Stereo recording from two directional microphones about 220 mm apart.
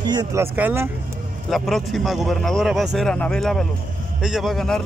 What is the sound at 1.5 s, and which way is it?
A man's voice, centre (ahead or behind).